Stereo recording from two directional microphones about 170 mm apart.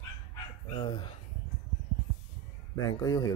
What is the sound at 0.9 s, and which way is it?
Speech, 30° left (ahead or behind).